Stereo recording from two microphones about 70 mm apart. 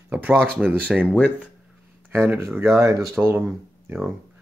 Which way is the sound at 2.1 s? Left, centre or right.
Right.